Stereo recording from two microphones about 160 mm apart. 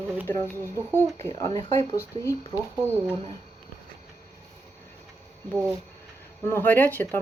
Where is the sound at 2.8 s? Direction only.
15° right (ahead or behind).